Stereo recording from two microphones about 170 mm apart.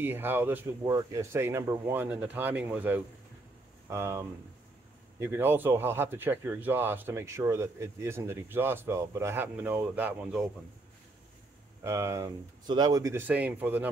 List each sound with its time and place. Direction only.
0.0 s a man's voice: 10° right (ahead or behind)
11.8 s a man's voice: 15° right (ahead or behind)